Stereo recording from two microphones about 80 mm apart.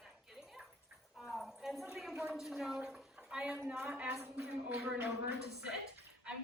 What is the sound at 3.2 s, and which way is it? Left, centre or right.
Speech, centre.